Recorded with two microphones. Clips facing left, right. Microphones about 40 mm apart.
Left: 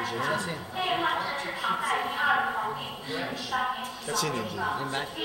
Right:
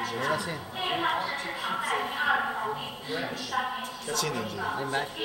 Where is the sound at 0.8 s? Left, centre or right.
Centre.